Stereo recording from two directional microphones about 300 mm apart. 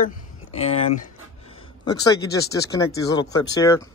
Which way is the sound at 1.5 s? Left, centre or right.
Centre.